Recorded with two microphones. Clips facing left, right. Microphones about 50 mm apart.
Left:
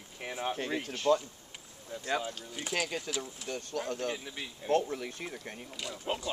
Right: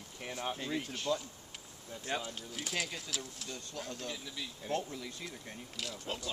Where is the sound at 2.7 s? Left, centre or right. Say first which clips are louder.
Left 5 dB; left.